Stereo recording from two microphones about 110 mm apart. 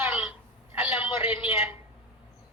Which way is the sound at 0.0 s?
20° right (ahead or behind).